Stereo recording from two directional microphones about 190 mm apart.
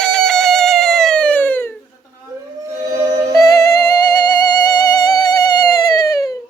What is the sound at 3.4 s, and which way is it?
Music, 20° left (ahead or behind).